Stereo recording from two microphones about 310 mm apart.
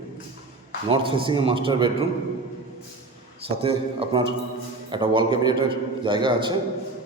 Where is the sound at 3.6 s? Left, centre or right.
Centre.